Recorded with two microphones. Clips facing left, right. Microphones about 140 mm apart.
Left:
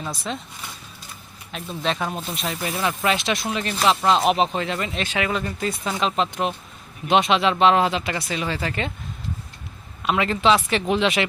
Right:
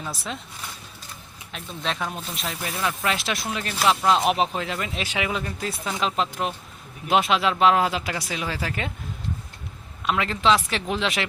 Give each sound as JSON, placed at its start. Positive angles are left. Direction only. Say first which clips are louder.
{"t": 1.5, "sound": "speech", "louder": "left 4 dB", "side_deg": 0}
{"t": 10.1, "sound": "speech", "louder": "left 2 dB", "side_deg": 0}